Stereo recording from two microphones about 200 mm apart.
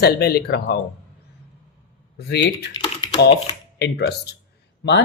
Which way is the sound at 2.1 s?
55° left (ahead or behind).